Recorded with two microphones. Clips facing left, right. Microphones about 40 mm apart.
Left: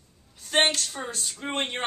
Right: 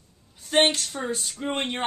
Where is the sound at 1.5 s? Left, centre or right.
Centre.